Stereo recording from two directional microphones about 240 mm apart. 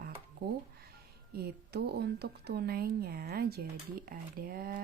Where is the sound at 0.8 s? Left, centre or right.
Right.